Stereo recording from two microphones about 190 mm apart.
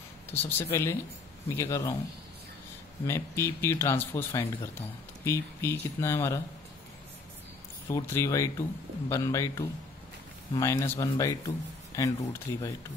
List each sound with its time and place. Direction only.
0.3 s speech: 10° left (ahead or behind)
3.1 s speech: 15° left (ahead or behind)
7.9 s speech: 15° left (ahead or behind)